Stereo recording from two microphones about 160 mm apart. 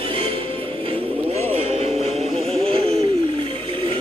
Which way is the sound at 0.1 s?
35° right (ahead or behind).